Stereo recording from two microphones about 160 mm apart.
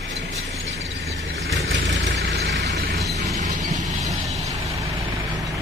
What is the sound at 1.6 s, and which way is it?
Vehicle, 90° right.